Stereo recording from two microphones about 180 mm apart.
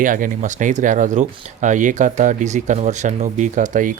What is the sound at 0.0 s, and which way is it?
Speech, 45° right (ahead or behind).